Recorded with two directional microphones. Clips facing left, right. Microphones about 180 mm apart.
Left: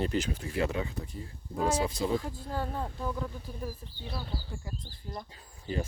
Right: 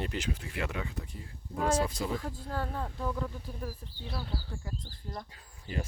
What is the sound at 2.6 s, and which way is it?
Speech, 15° left (ahead or behind).